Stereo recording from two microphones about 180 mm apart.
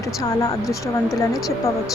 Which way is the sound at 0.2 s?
20° left (ahead or behind).